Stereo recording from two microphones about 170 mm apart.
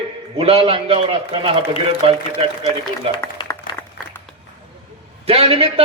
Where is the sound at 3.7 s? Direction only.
25° left (ahead or behind).